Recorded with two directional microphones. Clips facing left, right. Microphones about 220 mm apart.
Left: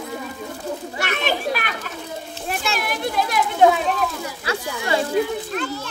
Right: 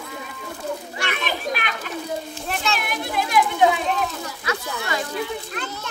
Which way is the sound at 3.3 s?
45° left (ahead or behind).